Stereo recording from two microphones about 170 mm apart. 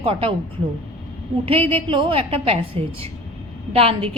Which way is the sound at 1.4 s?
35° right (ahead or behind).